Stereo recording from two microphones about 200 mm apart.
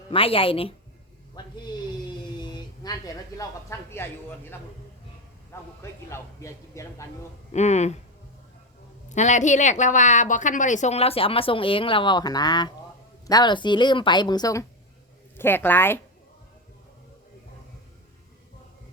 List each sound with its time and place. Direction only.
0.1 s a woman's voice: 25° left (ahead or behind)
1.4 s a sound: 20° left (ahead or behind)
5.5 s a man's voice: 15° left (ahead or behind)
7.5 s a woman's voice: 35° left (ahead or behind)
9.0 s a woman's voice: 35° left (ahead or behind); by 16.0 s 10° left (ahead or behind)